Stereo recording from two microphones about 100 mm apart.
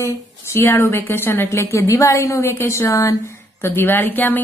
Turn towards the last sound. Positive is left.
turn(degrees=20)  # may be behind; listen again after turning